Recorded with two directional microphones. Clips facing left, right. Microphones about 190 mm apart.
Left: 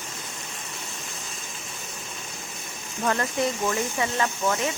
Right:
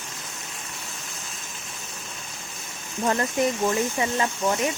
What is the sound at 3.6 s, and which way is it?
Speech, 20° right (ahead or behind).